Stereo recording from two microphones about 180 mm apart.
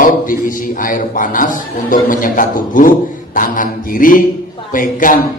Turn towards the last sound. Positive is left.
turn(degrees=50)  # may be behind; listen again after turning